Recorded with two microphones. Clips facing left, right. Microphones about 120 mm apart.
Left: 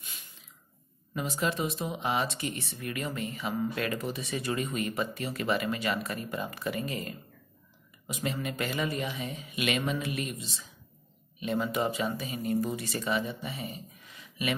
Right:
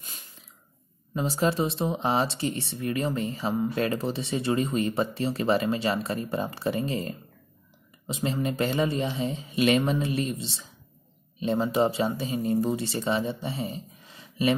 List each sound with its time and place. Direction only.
1.1 s speech: 30° right (ahead or behind)